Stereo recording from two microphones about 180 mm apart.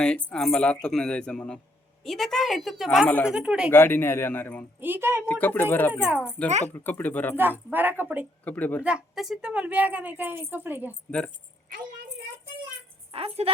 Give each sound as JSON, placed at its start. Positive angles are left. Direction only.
{"t": 0.0, "sound": "speech", "side_deg": 5}
{"t": 3.7, "sound": "a man's voice", "side_deg": 10}
{"t": 4.8, "sound": "a woman's voice", "side_deg": -10}
{"t": 5.3, "sound": "a man's voice", "side_deg": 10}
{"t": 5.9, "sound": "a woman's voice", "side_deg": -5}
{"t": 6.5, "sound": "speech", "side_deg": -40}
{"t": 6.7, "sound": "a man's voice", "side_deg": 10}
{"t": 7.7, "sound": "a woman's voice", "side_deg": -10}
{"t": 8.4, "sound": "a man's voice", "side_deg": 10}
{"t": 8.8, "sound": "a woman's voice", "side_deg": -5}
{"t": 13.1, "sound": "speech", "side_deg": -30}